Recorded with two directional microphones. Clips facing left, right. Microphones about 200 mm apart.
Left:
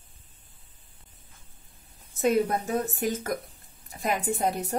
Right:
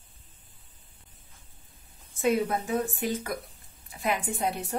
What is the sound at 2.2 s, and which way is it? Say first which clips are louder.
Speech: left 2 dB; 40° left (ahead or behind).